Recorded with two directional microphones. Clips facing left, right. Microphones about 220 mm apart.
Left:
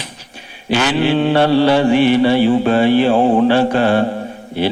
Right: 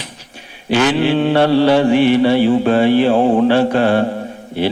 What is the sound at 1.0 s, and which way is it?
Mantra, 50° right (ahead or behind).